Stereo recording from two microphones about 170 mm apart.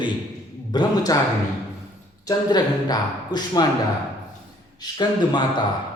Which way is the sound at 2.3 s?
25° left (ahead or behind).